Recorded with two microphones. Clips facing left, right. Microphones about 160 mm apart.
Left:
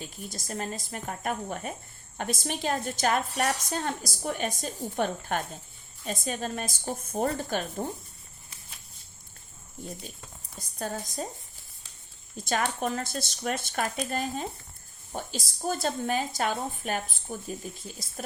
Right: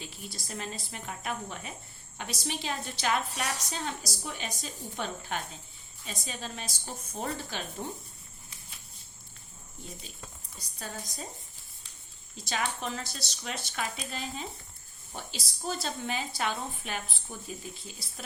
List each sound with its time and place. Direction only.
0.0 s a woman's voice: 45° left (ahead or behind)
10.6 s a woman's voice: 50° left (ahead or behind)
12.4 s a woman's voice: 50° left (ahead or behind)